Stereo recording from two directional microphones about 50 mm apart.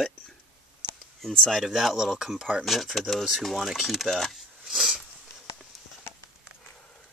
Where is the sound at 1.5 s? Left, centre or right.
Centre.